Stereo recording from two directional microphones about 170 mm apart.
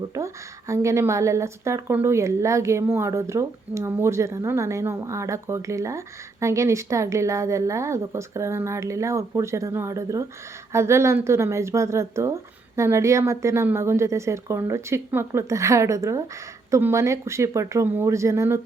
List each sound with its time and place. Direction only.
0.7 s a woman's voice: 15° right (ahead or behind)